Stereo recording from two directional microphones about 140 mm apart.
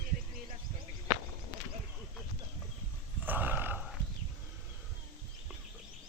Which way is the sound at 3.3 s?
15° right (ahead or behind).